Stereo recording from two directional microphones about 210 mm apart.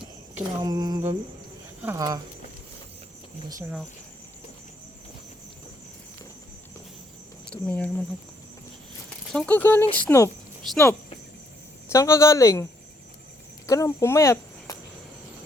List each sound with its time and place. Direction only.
0.3 s a sound: 20° right (ahead or behind)
1.8 s speech: 15° right (ahead or behind)
3.6 s speech: 5° right (ahead or behind)
7.5 s speech: 5° left (ahead or behind)
9.3 s speech: 5° left (ahead or behind)
11.9 s speech: 15° left (ahead or behind)
13.7 s speech: 15° left (ahead or behind)